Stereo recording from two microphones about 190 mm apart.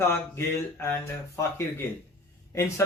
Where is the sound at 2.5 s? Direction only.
15° left (ahead or behind).